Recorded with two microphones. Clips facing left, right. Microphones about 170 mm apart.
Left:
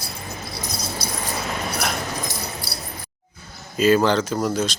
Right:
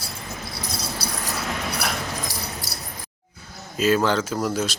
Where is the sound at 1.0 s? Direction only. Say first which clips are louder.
Left 1 dB; 35° right (ahead or behind).